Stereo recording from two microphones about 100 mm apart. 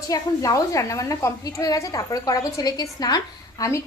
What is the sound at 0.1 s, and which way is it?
A woman's voice, 35° left (ahead or behind).